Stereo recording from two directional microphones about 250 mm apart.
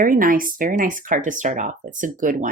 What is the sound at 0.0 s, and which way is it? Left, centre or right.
Speech, right.